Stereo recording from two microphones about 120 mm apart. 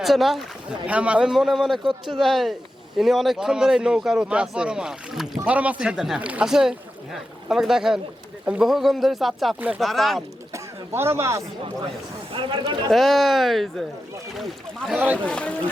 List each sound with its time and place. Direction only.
0.0 s speech: centre (ahead or behind)
9.6 s speech: 15° right (ahead or behind)
9.8 s speech: centre (ahead or behind)
10.5 s a sound: 20° right (ahead or behind)
12.3 s speech: 45° right (ahead or behind)
12.9 s speech: centre (ahead or behind)
14.9 s speech: 15° right (ahead or behind)
15.3 s speech: 10° left (ahead or behind)